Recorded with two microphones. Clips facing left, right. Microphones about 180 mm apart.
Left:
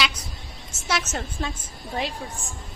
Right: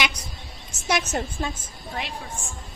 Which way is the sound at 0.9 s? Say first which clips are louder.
Right 3 dB; 15° right (ahead or behind).